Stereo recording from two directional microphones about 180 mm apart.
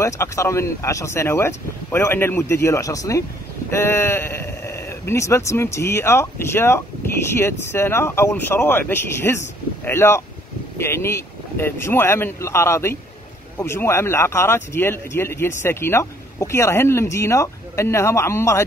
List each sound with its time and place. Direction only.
0.0 s speech: 15° left (ahead or behind)